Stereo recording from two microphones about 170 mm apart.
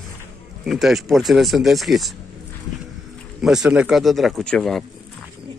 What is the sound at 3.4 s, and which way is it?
Speech, 5° right (ahead or behind).